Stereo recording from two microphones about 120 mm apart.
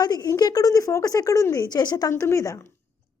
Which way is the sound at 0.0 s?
30° left (ahead or behind).